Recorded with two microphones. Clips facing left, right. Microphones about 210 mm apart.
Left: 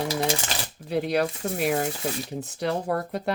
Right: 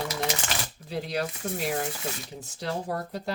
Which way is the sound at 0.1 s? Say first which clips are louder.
Left 5 dB; 30° left (ahead or behind).